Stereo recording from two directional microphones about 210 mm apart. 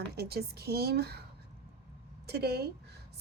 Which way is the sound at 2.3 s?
50° right (ahead or behind).